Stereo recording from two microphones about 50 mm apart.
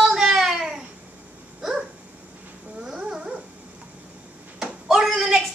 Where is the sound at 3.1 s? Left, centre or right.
Centre.